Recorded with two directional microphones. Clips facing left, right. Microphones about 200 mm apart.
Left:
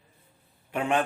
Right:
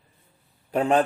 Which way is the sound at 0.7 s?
35° right (ahead or behind).